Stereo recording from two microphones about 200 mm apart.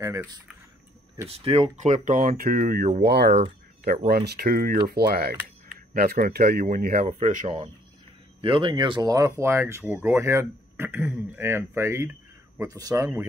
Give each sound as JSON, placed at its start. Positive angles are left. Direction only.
{"t": 0.0, "sound": "speech", "side_deg": -15}
{"t": 1.3, "sound": "speech", "side_deg": -30}
{"t": 8.4, "sound": "speech", "side_deg": -25}